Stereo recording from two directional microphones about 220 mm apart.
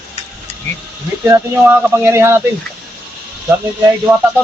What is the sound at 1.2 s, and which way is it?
Speech, 10° right (ahead or behind).